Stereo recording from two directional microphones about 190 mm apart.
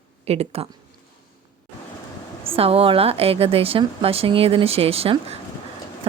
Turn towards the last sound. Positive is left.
turn(degrees=-30)  # may be behind; listen again after turning